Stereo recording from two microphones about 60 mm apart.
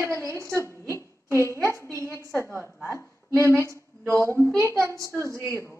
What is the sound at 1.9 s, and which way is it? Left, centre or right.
Speech, right.